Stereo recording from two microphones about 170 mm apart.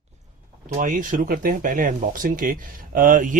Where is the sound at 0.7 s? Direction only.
55° right (ahead or behind).